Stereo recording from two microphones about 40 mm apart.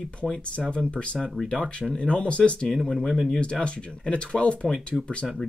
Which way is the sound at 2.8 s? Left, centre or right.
Centre.